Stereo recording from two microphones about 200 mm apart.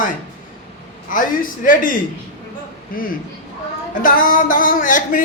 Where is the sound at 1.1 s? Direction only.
45° left (ahead or behind).